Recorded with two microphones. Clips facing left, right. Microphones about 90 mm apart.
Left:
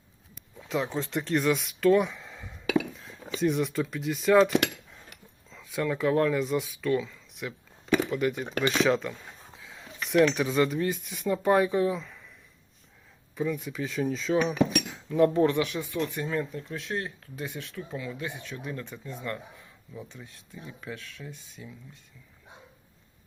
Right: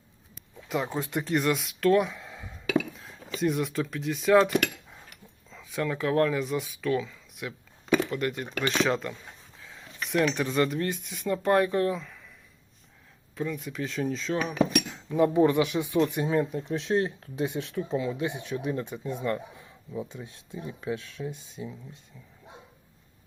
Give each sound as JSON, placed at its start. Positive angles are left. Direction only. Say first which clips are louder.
{"t": 0.7, "sound": "speech", "louder": "even", "side_deg": -5}
{"t": 13.3, "sound": "speech", "louder": "left 2 dB", "side_deg": 0}
{"t": 16.6, "sound": "speech", "louder": "right 7 dB", "side_deg": -25}